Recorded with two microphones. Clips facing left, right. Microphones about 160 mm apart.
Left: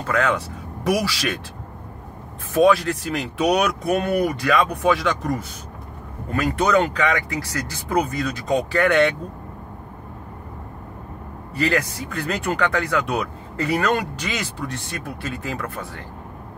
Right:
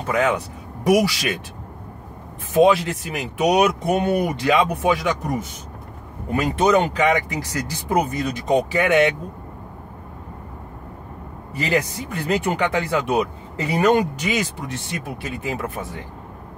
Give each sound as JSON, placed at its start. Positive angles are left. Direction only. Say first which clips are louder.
{"t": 0.0, "sound": "speech", "louder": "right 1 dB", "side_deg": -20}
{"t": 2.5, "sound": "speech", "louder": "right 1 dB", "side_deg": -20}
{"t": 11.5, "sound": "speech", "louder": "even", "side_deg": -20}